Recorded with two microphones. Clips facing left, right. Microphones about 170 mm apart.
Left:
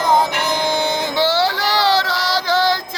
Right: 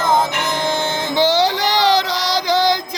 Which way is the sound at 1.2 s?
20° right (ahead or behind).